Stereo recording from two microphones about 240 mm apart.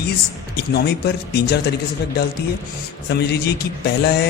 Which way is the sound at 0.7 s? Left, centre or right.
Left.